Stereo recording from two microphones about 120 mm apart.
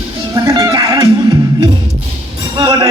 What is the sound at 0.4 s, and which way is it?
Music, 30° right (ahead or behind).